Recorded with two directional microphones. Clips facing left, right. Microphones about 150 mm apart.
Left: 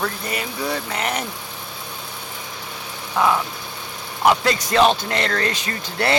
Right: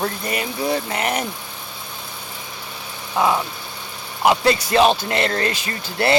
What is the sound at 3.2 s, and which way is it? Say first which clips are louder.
Speech: even; 15° right (ahead or behind).